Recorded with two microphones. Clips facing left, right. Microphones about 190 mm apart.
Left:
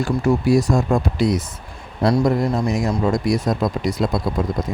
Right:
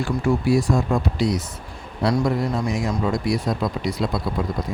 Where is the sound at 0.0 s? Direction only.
40° left (ahead or behind).